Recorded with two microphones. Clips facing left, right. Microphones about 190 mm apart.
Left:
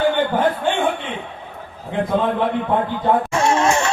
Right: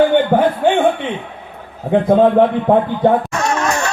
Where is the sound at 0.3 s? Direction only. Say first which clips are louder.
Right 6 dB; 70° right (ahead or behind).